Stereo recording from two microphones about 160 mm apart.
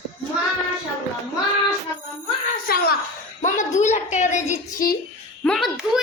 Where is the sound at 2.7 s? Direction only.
70° left (ahead or behind).